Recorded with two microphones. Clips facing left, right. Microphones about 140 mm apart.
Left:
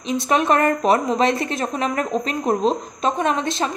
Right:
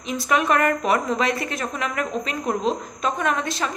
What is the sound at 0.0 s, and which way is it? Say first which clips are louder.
Speech: left 3 dB; 25° left (ahead or behind).